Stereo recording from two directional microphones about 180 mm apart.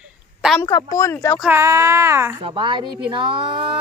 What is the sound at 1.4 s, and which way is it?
Speech, 15° right (ahead or behind).